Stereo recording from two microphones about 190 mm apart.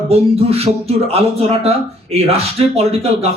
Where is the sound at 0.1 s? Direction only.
30° right (ahead or behind).